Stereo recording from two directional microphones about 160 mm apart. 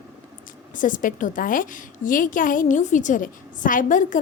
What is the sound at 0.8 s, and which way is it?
A woman's voice, 55° left (ahead or behind).